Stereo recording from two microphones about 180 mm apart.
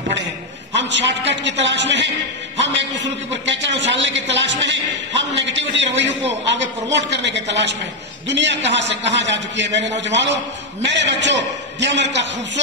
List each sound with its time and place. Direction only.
0.7 s a man's voice: 80° right